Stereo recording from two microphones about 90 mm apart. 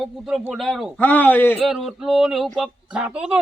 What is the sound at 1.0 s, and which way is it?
Speech, 20° left (ahead or behind).